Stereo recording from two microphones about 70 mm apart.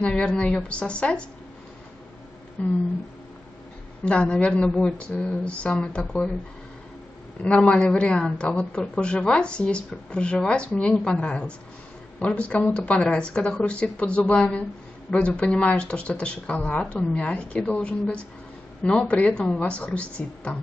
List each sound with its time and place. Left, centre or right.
0.0 s speech: centre
2.6 s speech: centre
4.0 s speech: centre
7.4 s speech: centre